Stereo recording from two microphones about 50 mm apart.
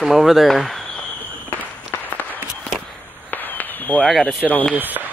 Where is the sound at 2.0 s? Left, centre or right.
Left.